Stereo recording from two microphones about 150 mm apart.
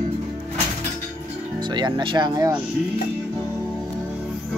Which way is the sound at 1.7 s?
30° right (ahead or behind).